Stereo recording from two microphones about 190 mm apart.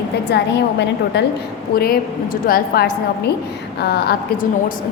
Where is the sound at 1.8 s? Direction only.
50° left (ahead or behind).